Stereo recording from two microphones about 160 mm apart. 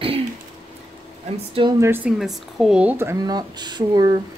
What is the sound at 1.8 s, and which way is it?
Speech, 15° right (ahead or behind).